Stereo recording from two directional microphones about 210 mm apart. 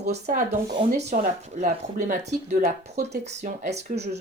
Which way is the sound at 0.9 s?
35° right (ahead or behind).